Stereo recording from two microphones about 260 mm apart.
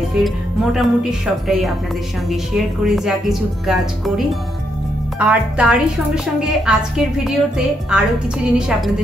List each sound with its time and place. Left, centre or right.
0.7 s a woman's voice: centre